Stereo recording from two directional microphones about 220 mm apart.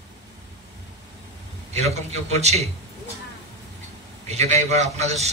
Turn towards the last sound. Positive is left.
turn(degrees=-30)  # may be behind; listen again after turning